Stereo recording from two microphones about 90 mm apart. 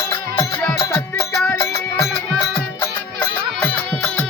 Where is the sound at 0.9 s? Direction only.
30° left (ahead or behind).